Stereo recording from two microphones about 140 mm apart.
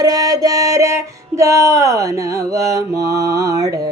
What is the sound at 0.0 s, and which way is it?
Music, 25° right (ahead or behind).